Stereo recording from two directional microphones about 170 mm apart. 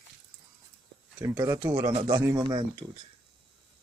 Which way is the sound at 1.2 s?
20° right (ahead or behind).